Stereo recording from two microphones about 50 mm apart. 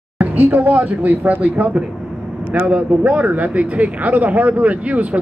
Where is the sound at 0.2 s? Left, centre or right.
Right.